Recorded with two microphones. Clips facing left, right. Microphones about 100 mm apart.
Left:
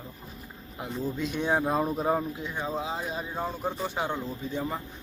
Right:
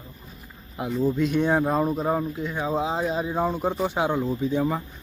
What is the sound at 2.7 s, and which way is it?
Speech, 25° right (ahead or behind).